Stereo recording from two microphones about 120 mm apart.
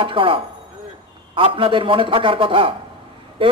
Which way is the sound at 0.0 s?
45° right (ahead or behind).